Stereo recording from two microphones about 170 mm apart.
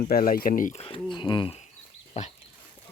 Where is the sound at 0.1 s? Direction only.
60° left (ahead or behind).